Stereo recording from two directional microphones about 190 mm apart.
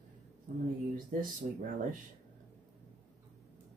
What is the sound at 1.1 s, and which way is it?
Speech, 45° right (ahead or behind).